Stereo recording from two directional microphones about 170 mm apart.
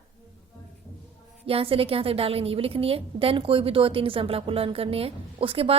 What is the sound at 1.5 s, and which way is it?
A woman's voice, 35° right (ahead or behind).